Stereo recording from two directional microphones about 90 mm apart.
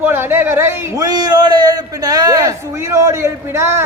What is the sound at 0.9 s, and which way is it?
A man's voice, 45° right (ahead or behind).